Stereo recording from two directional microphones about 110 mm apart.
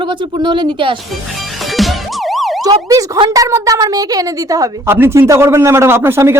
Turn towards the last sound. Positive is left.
turn(degrees=-25)  # may be behind; listen again after turning